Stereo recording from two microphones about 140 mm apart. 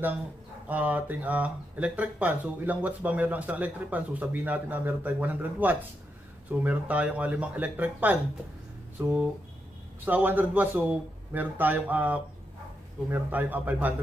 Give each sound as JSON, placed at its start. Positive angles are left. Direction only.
{"t": 0.7, "sound": "speech", "side_deg": -10}